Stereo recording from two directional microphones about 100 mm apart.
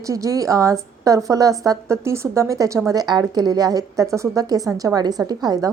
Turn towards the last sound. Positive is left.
turn(degrees=-40)  # may be behind; listen again after turning